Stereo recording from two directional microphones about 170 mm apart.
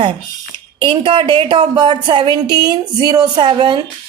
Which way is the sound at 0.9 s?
30° right (ahead or behind).